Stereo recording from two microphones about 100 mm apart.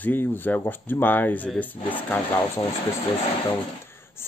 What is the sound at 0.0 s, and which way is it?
Speech, 20° left (ahead or behind).